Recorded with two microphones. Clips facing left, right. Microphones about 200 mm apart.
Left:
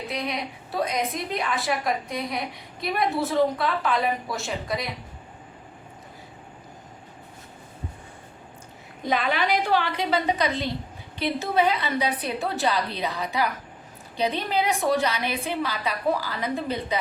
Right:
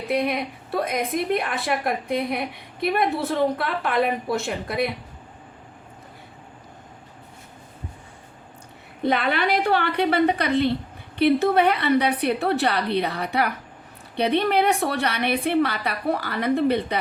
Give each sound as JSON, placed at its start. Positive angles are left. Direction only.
{"t": 0.1, "sound": "a woman's voice", "side_deg": -55}
{"t": 9.0, "sound": "a woman's voice", "side_deg": -60}